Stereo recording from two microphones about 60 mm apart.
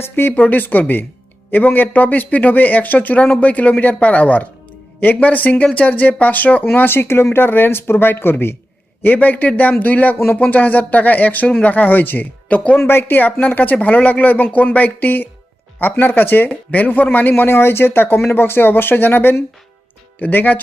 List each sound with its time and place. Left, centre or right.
0.0 s speech: left
0.3 s speech: left
9.0 s speech: left
12.8 s speech: left